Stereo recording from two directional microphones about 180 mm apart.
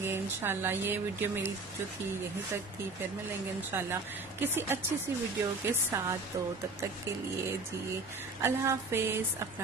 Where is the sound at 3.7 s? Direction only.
15° right (ahead or behind).